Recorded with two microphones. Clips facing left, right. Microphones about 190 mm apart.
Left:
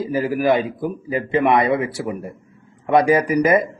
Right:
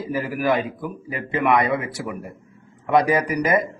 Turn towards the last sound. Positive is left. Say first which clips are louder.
# left 4 dB
turn(degrees=30)  # may be behind; listen again after turning